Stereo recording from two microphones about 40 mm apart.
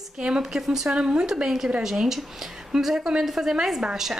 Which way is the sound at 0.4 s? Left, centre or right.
Centre.